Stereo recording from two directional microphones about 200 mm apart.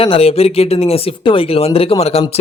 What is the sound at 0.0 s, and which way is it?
A man's voice, 30° left (ahead or behind).